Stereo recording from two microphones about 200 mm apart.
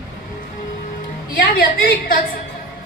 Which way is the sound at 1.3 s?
50° left (ahead or behind).